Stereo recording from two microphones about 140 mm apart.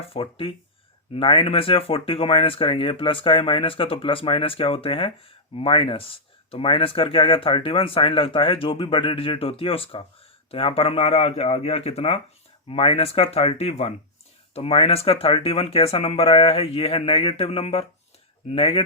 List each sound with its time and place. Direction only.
0.0 s speech: 40° left (ahead or behind)